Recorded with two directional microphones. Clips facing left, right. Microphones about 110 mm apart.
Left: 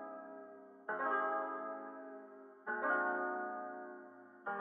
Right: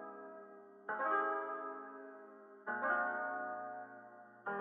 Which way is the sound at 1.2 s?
20° left (ahead or behind).